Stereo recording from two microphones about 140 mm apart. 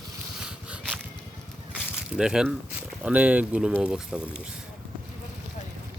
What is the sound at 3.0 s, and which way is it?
Speech, 10° right (ahead or behind).